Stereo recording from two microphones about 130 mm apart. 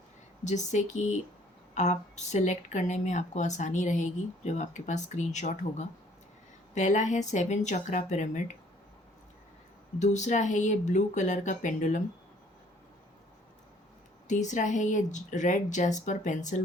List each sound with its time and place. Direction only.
0.4 s speech: 65° left (ahead or behind)
10.0 s speech: 65° left (ahead or behind)
14.3 s speech: 70° left (ahead or behind)